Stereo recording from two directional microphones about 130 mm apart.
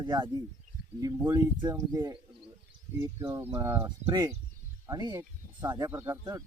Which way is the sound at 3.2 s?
25° right (ahead or behind).